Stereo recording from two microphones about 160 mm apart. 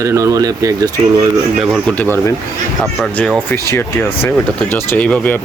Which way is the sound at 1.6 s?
5° right (ahead or behind).